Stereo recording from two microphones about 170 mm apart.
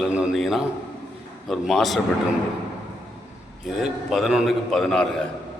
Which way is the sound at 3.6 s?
Centre (ahead or behind).